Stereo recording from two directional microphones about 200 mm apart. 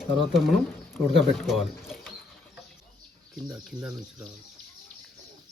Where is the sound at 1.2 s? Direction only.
Centre (ahead or behind).